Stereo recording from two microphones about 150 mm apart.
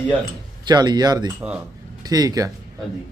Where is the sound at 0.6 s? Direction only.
30° right (ahead or behind).